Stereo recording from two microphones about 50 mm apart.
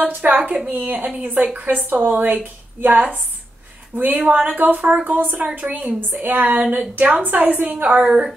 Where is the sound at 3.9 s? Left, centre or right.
Right.